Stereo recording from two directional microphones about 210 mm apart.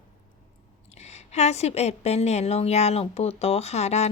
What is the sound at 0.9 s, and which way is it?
A woman's voice, 30° left (ahead or behind).